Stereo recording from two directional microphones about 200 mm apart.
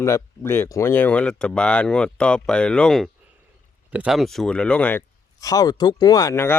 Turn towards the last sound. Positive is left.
turn(degrees=10)  # may be behind; listen again after turning